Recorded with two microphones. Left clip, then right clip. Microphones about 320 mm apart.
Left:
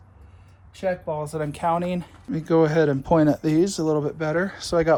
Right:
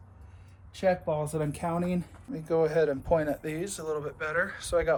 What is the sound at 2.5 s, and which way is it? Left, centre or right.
Speech, left.